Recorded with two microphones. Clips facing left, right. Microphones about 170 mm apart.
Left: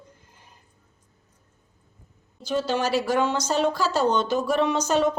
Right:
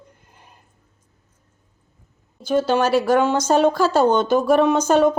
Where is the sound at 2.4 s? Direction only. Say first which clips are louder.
Right 6 dB; 50° right (ahead or behind).